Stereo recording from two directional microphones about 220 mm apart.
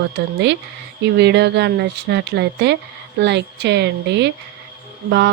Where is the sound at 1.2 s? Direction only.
50° right (ahead or behind).